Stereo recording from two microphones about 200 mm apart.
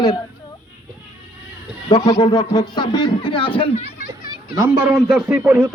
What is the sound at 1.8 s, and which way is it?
Speech, 20° left (ahead or behind).